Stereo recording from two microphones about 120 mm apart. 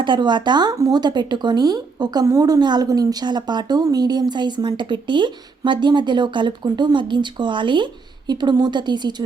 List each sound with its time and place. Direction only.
0.0 s speech: 40° right (ahead or behind)